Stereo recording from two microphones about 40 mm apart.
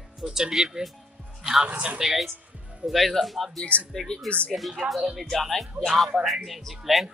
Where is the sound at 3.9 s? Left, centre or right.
Centre.